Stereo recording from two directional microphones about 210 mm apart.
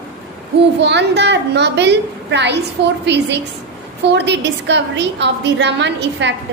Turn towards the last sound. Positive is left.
turn(degrees=-55)  # may be behind; listen again after turning